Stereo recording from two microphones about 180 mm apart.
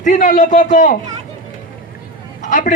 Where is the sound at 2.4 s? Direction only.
45° left (ahead or behind).